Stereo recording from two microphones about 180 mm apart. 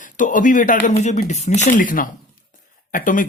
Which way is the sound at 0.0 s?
45° left (ahead or behind).